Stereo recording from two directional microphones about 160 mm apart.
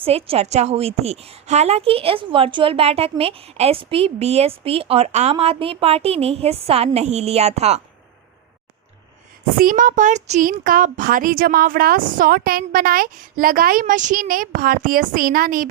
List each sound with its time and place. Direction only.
0.0 s a woman's voice: 35° right (ahead or behind)
9.6 s speech: 60° right (ahead or behind)